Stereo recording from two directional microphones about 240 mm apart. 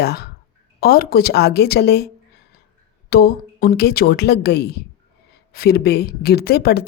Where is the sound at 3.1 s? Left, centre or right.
Left.